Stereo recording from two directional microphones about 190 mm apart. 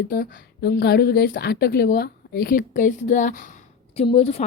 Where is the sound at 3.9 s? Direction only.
30° left (ahead or behind).